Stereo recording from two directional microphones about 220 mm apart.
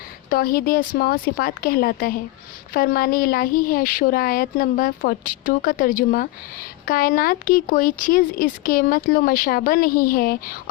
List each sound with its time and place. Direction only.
0.3 s speech: 40° left (ahead or behind)